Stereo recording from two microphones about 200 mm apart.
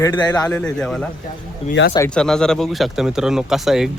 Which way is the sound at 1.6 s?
30° left (ahead or behind).